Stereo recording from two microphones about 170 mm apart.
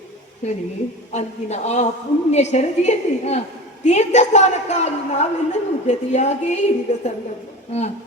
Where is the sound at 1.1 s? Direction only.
40° left (ahead or behind).